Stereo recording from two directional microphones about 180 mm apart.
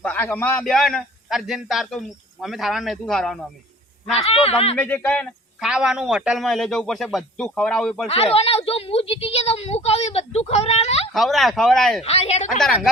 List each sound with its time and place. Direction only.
0.0 s a man's voice: 10° left (ahead or behind)
4.1 s a woman's voice: 35° left (ahead or behind)
4.8 s a man's voice: 10° left (ahead or behind)
5.6 s a man's voice: 5° right (ahead or behind)
8.0 s a woman's voice: 35° left (ahead or behind)
11.1 s a man's voice: centre (ahead or behind)
12.0 s a woman's voice: 35° left (ahead or behind)
12.5 s a man's voice: 5° left (ahead or behind)